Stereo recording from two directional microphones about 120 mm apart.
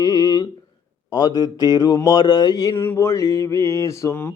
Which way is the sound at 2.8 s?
20° left (ahead or behind).